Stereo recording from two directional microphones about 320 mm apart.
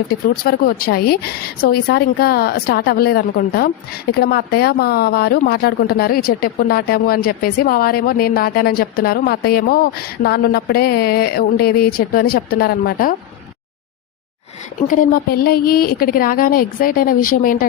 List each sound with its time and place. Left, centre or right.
0.1 s speech: left
14.8 s speech: left